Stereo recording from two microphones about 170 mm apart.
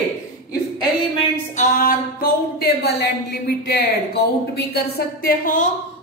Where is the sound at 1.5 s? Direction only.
55° left (ahead or behind).